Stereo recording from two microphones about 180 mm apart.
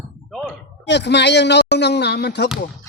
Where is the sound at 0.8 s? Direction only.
75° left (ahead or behind).